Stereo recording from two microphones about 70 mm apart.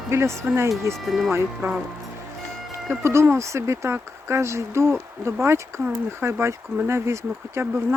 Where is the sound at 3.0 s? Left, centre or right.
Right.